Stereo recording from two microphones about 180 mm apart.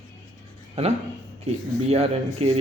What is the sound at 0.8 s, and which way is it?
A man's voice, 35° right (ahead or behind).